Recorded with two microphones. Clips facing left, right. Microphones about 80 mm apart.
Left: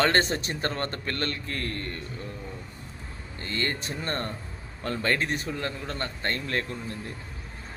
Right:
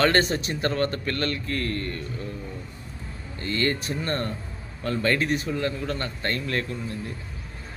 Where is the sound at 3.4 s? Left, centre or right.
Left.